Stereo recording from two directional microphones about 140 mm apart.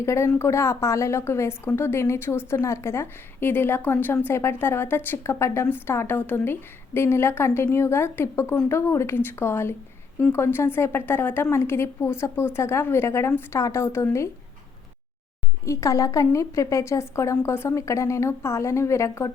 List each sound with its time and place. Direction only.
0.0 s a woman's voice: 20° left (ahead or behind)
15.6 s a woman's voice: 20° left (ahead or behind)